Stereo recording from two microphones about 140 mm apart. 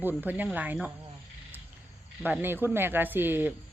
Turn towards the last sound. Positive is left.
turn(degrees=-15)  # may be behind; listen again after turning